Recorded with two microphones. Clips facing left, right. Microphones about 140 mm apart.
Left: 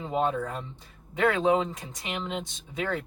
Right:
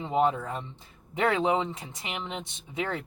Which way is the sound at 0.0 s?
20° right (ahead or behind).